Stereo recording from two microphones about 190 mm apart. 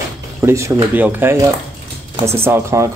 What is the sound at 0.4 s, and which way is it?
Speech, 15° right (ahead or behind).